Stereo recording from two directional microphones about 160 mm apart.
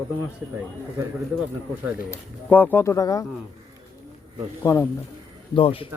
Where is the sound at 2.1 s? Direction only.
10° left (ahead or behind).